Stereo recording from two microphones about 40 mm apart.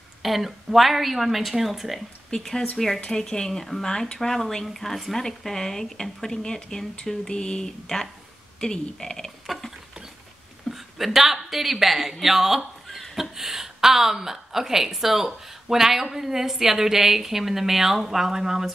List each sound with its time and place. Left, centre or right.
0.2 s a woman's voice: centre
2.3 s a woman's voice: centre
10.7 s a sound: left
11.1 s a woman's voice: centre